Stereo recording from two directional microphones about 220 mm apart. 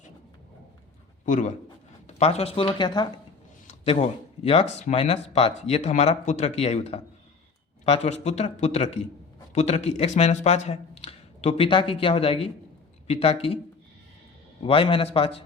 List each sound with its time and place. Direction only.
1.2 s a man's voice: 35° left (ahead or behind)
14.6 s speech: 25° left (ahead or behind)